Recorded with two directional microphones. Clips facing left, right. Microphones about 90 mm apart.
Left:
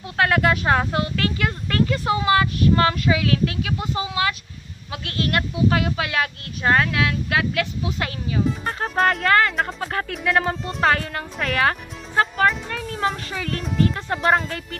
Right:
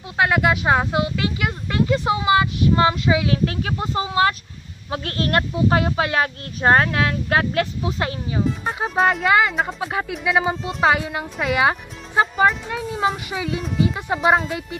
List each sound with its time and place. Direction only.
0.2 s speech: 15° right (ahead or behind)
3.4 s speech: 35° right (ahead or behind)
8.6 s speech: 5° right (ahead or behind)